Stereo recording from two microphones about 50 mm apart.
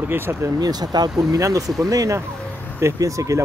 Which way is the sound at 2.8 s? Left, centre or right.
Right.